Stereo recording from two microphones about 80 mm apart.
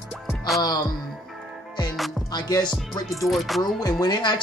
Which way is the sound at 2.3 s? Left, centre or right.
Left.